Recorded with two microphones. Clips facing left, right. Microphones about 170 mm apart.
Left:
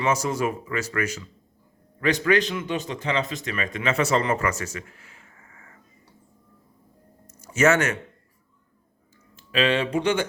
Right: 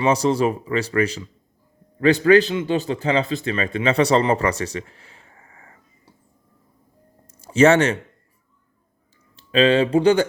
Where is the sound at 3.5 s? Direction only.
30° right (ahead or behind).